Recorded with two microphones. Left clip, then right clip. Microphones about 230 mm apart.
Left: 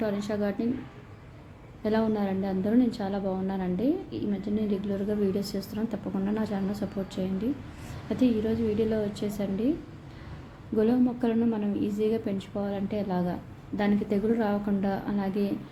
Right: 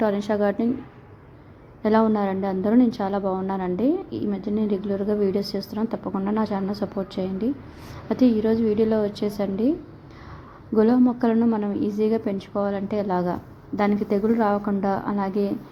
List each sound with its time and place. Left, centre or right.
0.0 s a woman's voice: right
1.8 s a woman's voice: right
10.8 s a woman's voice: centre